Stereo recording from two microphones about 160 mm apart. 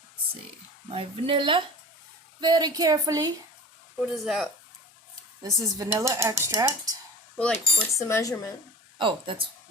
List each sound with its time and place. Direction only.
0.9 s speech: 35° right (ahead or behind)
4.0 s speech: centre (ahead or behind)
5.4 s speech: 20° right (ahead or behind)
7.3 s speech: 5° left (ahead or behind)
7.8 s speech: 15° left (ahead or behind)
9.0 s speech: 30° right (ahead or behind)